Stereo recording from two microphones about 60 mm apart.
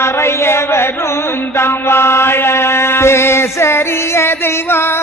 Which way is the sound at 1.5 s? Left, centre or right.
Left.